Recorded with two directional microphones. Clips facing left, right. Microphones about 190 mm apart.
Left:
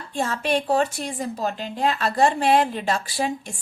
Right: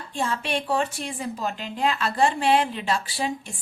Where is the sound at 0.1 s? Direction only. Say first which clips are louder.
Left 4 dB; 40° left (ahead or behind).